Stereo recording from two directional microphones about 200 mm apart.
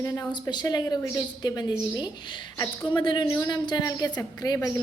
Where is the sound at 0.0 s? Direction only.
20° left (ahead or behind).